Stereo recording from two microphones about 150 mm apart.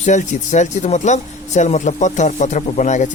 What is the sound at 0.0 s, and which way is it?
Speech, 50° left (ahead or behind).